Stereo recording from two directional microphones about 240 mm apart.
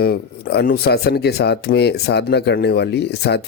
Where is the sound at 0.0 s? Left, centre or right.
Left.